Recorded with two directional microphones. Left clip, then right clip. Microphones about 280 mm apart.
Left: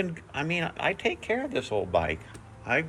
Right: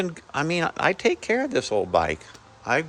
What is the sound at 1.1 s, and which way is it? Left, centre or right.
Speech, right.